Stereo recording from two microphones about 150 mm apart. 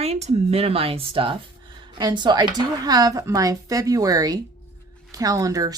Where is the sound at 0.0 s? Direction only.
45° right (ahead or behind).